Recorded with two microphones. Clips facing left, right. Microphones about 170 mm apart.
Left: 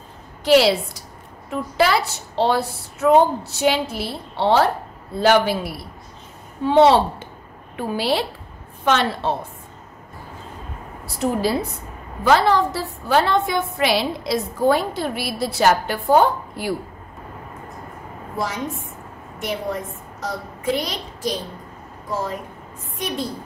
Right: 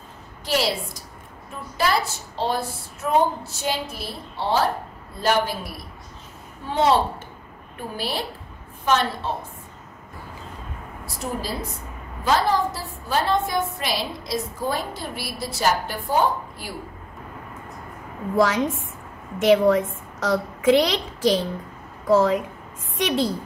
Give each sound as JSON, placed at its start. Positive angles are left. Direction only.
{"t": 0.5, "sound": "a woman's voice", "side_deg": 75}
{"t": 5.2, "sound": "a woman's voice", "side_deg": 80}
{"t": 12.3, "sound": "a woman's voice", "side_deg": 70}
{"t": 18.3, "sound": "a woman's voice", "side_deg": -90}